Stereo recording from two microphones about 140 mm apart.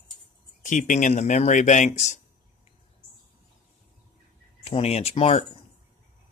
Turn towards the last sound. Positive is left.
turn(degrees=45)  # may be behind; listen again after turning